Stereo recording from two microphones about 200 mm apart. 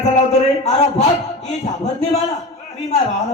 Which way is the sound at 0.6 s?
35° left (ahead or behind).